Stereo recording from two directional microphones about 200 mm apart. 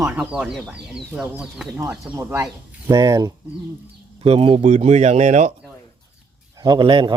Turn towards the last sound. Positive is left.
turn(degrees=-25)  # may be behind; listen again after turning